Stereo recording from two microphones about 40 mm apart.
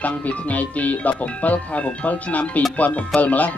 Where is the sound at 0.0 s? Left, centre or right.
Left.